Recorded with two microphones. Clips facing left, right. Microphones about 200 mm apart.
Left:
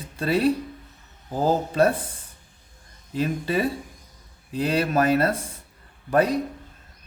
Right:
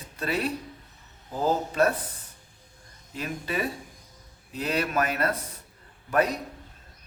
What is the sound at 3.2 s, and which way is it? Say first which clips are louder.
Speech: left 7 dB; 30° left (ahead or behind).